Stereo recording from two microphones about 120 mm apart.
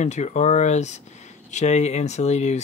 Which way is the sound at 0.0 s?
75° left (ahead or behind).